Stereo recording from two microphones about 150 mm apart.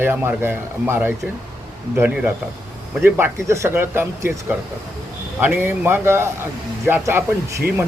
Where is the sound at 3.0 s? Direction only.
15° right (ahead or behind).